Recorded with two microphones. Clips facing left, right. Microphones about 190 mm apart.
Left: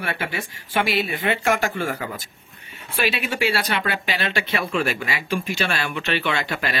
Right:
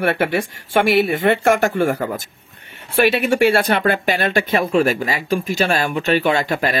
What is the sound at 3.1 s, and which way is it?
Speech, 55° right (ahead or behind).